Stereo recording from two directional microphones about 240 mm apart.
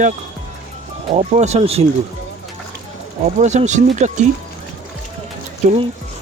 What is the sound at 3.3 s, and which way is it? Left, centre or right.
Speech, right.